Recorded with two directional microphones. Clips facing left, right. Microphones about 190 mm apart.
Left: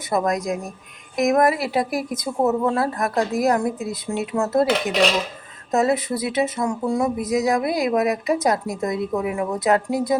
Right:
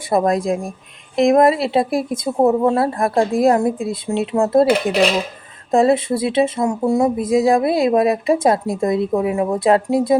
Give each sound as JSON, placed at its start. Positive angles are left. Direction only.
{"t": 0.1, "sound": "speech", "side_deg": -30}
{"t": 5.7, "sound": "speech", "side_deg": -30}